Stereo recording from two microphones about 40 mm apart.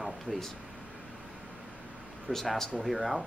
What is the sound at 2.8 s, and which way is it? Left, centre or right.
Speech, centre.